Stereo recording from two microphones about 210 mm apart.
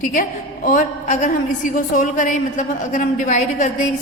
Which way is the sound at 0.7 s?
35° left (ahead or behind).